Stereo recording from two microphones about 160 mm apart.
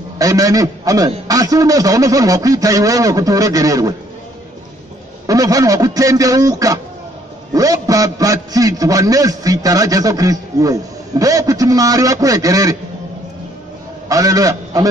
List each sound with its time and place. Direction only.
0.2 s a man's voice: 20° right (ahead or behind)
5.2 s a man's voice: 20° right (ahead or behind)
14.0 s a man's voice: 20° right (ahead or behind)